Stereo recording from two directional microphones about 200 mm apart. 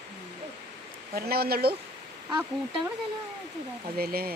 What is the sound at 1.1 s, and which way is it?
Speech, 50° right (ahead or behind).